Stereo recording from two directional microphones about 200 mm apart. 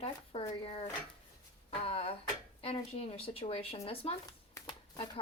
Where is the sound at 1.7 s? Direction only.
30° left (ahead or behind).